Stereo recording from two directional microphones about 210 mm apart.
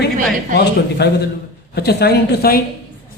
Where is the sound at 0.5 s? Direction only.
50° left (ahead or behind).